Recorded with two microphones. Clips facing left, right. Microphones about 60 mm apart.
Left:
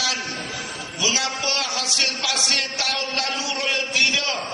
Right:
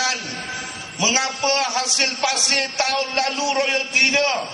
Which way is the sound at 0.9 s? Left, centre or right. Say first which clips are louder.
Right 3 dB; right.